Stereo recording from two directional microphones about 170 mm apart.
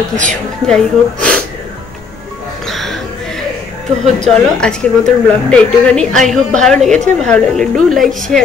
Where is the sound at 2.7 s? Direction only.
Centre (ahead or behind).